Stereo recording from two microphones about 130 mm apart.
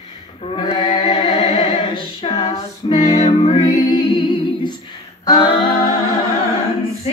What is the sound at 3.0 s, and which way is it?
Music, 30° left (ahead or behind).